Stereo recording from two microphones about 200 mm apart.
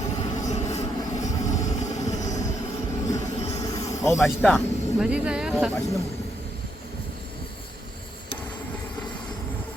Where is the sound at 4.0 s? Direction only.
15° left (ahead or behind).